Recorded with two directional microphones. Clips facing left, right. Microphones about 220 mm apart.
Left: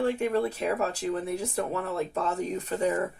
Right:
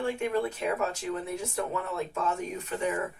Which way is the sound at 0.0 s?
35° left (ahead or behind).